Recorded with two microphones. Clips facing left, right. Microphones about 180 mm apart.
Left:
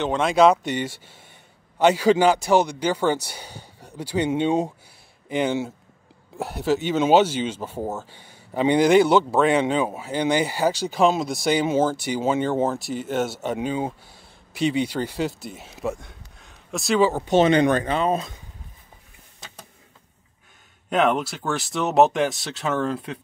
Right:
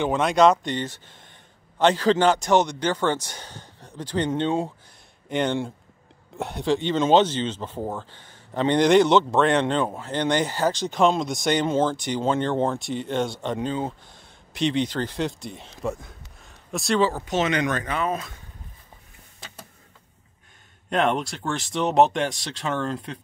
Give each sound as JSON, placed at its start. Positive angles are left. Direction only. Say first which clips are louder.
{"t": 0.0, "sound": "speech", "louder": "left 1 dB", "side_deg": 0}
{"t": 17.1, "sound": "speech", "louder": "left 7 dB", "side_deg": 30}
{"t": 20.9, "sound": "speech", "louder": "left 2 dB", "side_deg": 5}